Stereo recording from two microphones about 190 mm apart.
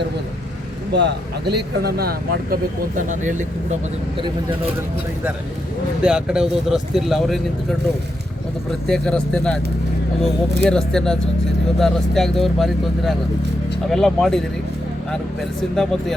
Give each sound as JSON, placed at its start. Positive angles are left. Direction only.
{"t": 0.9, "sound": "speech", "side_deg": -60}
{"t": 6.0, "sound": "speech", "side_deg": -5}
{"t": 8.9, "sound": "speech", "side_deg": 5}
{"t": 10.6, "sound": "speech", "side_deg": 5}
{"t": 15.7, "sound": "speech", "side_deg": 0}